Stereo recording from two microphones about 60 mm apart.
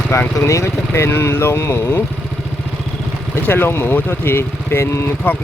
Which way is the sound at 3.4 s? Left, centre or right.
Left.